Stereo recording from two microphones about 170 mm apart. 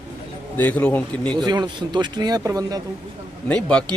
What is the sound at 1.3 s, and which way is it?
Speech, 25° right (ahead or behind).